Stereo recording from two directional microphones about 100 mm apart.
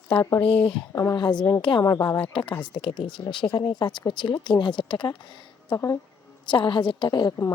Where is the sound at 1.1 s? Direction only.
50° left (ahead or behind).